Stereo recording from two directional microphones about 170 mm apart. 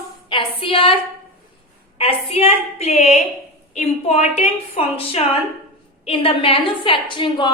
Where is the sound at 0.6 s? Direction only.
30° left (ahead or behind).